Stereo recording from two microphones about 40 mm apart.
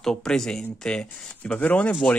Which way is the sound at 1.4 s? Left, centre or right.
Left.